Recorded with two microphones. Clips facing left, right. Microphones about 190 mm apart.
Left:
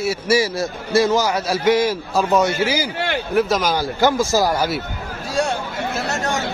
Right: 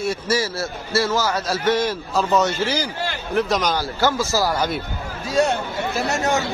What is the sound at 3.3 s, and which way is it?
Speech, 5° left (ahead or behind).